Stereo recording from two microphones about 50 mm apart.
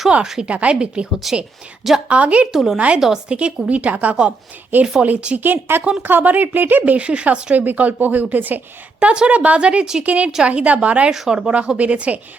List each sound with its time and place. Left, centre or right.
0.4 s a woman's voice: right
1.2 s speech: centre
2.0 s a woman's voice: right
2.5 s speech: centre
2.7 s a woman's voice: right
4.7 s speech: right
7.6 s speech: right
9.0 s a woman's voice: right
11.1 s a woman's voice: centre